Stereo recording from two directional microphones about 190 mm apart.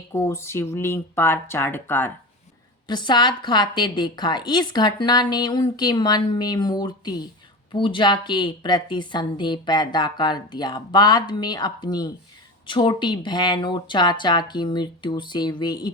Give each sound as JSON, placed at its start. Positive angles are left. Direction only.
{"t": 0.1, "sound": "speech", "side_deg": 15}
{"t": 2.8, "sound": "a woman's voice", "side_deg": 25}